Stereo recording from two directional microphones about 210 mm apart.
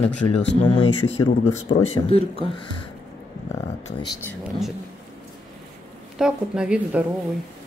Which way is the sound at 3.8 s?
15° left (ahead or behind).